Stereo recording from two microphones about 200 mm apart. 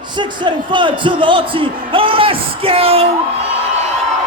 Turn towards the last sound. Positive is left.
turn(degrees=-30)  # may be behind; listen again after turning